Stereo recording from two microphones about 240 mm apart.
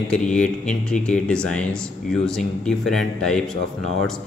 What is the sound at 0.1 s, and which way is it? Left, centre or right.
Speech, centre.